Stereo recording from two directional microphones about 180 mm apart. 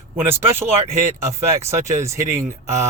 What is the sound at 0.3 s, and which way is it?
Speech, 15° right (ahead or behind).